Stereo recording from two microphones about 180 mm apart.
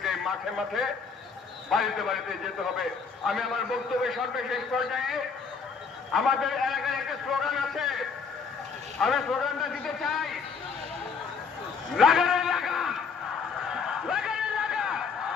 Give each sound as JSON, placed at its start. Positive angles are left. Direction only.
{"t": 0.0, "sound": "a man's voice", "side_deg": 0}
{"t": 6.1, "sound": "a man's voice", "side_deg": 0}
{"t": 11.9, "sound": "bleat", "side_deg": 0}
{"t": 13.7, "sound": "a sound", "side_deg": -5}